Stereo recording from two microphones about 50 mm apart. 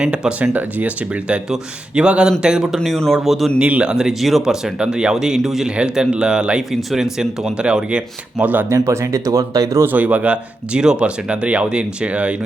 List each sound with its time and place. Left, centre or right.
0.0 s speech: right
2.0 s speech: centre
2.8 s speech: centre
3.6 s speech: right
3.9 s speech: centre
5.6 s speech: centre
6.6 s speech: centre
7.6 s speech: right
8.4 s speech: right
8.7 s speech: right
9.8 s speech: right
10.3 s speech: centre